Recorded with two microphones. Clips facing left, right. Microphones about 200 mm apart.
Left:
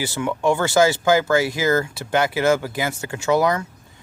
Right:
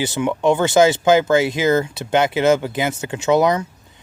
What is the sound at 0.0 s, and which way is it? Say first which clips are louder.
Speech: right 3 dB; 20° right (ahead or behind).